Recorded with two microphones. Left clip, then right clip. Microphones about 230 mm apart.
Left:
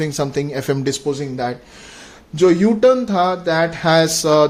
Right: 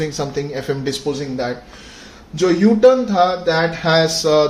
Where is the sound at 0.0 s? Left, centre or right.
Left.